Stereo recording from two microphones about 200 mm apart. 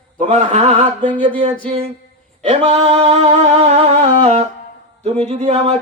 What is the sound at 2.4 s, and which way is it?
Singing, 30° right (ahead or behind).